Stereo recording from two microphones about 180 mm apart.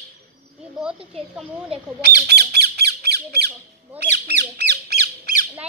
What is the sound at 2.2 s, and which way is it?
Squawk, 65° right (ahead or behind).